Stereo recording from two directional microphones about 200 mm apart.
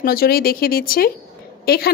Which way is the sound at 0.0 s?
50° left (ahead or behind).